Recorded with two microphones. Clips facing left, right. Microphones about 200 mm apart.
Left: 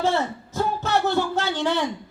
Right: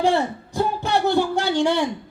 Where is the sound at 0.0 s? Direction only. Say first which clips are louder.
Right 3 dB; 15° right (ahead or behind).